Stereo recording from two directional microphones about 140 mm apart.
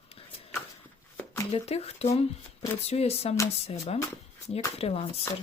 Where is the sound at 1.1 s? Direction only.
20° left (ahead or behind).